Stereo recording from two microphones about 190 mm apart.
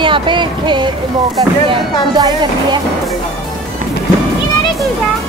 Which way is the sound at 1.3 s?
20° right (ahead or behind).